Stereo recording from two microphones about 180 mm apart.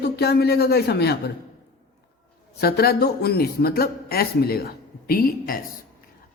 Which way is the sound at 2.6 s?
60° left (ahead or behind).